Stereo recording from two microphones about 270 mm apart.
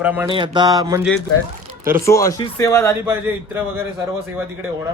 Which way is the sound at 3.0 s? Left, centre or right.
Centre.